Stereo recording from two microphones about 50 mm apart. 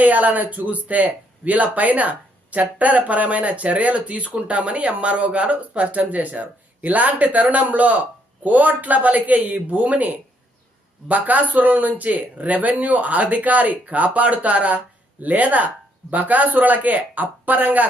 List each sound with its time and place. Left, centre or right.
0.0 s speech: right